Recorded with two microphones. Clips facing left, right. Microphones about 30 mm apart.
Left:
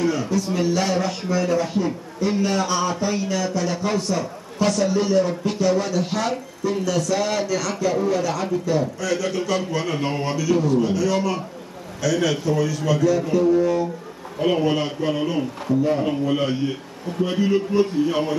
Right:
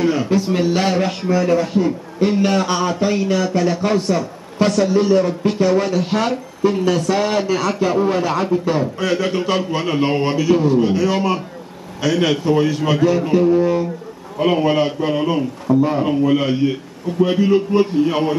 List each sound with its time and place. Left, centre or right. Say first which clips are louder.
0.0 s a man's voice: right 5 dB; right
1.3 s a man's voice: right 5 dB; right